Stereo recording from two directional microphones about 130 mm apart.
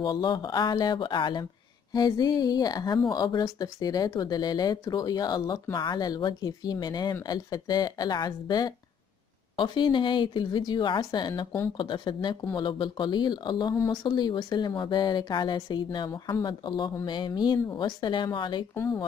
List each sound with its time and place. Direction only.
0.0 s speech: 35° left (ahead or behind)